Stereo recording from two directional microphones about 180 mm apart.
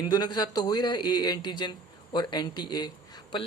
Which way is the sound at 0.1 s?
25° left (ahead or behind).